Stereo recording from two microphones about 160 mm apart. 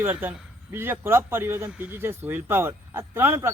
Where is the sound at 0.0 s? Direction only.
15° right (ahead or behind).